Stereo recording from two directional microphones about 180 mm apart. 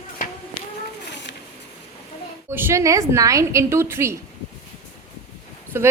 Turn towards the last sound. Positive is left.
turn(degrees=-15)  # may be behind; listen again after turning